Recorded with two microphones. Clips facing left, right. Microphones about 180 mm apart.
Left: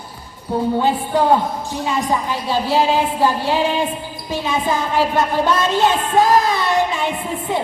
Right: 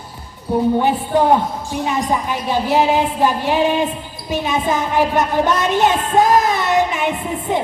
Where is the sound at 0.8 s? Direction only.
20° right (ahead or behind).